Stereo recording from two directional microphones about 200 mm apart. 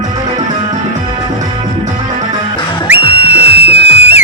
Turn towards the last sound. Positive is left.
turn(degrees=30)  # may be behind; listen again after turning